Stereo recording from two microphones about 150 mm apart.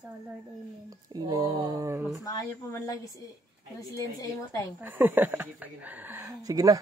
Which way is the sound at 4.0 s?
20° left (ahead or behind).